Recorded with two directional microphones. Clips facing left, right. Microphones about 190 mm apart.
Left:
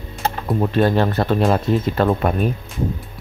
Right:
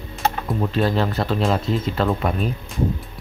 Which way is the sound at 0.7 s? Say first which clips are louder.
Left 4 dB; 55° left (ahead or behind).